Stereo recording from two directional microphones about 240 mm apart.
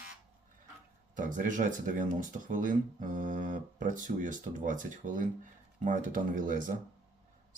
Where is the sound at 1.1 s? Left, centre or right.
Right.